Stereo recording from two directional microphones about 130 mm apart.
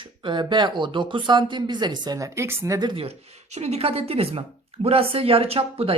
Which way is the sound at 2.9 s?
50° right (ahead or behind).